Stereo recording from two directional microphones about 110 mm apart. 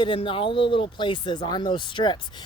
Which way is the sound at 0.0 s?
50° left (ahead or behind).